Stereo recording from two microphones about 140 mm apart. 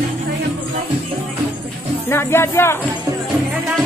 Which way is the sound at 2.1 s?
15° left (ahead or behind).